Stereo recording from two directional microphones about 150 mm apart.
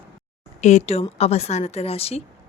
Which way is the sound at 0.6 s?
50° left (ahead or behind).